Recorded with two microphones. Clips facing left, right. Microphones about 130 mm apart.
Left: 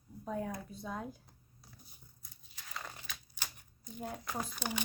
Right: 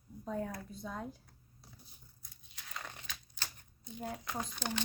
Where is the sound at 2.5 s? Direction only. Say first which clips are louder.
Left 1 dB; 5° left (ahead or behind).